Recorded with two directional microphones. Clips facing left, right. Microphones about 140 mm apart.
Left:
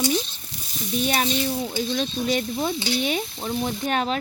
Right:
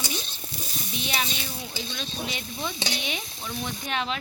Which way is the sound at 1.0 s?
45° left (ahead or behind).